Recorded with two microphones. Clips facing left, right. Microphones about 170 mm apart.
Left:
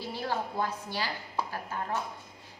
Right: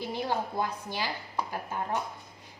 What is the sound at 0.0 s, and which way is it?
A woman's voice, 20° right (ahead or behind).